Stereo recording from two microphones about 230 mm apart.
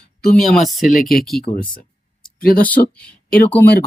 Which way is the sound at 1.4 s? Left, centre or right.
Left.